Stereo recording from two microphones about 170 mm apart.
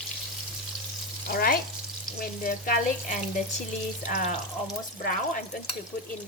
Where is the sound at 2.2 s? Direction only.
55° left (ahead or behind).